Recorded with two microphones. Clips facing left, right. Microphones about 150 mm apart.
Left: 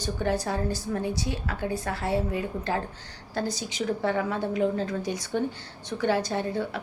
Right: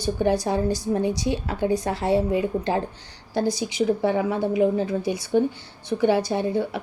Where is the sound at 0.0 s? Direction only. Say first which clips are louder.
Right 6 dB; 15° right (ahead or behind).